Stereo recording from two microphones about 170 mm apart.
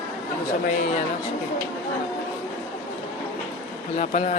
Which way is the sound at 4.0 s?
45° left (ahead or behind).